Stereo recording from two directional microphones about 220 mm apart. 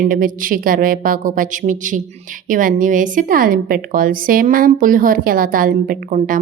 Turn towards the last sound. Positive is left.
turn(degrees=-35)  # may be behind; listen again after turning